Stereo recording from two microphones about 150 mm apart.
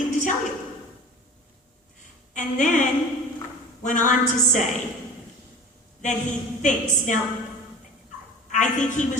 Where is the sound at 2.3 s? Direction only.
60° left (ahead or behind).